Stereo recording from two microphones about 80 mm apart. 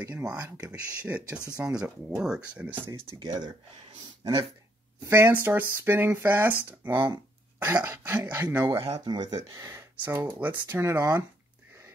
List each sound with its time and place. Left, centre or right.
0.1 s speech: centre
3.2 s speech: right
5.0 s speech: right
8.9 s speech: right
9.8 s speech: right
11.0 s speech: right